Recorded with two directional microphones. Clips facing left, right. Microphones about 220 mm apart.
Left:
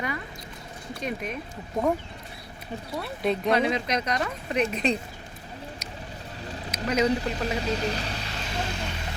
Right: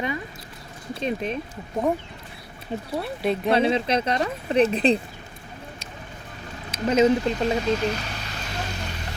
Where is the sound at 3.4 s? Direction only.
30° right (ahead or behind).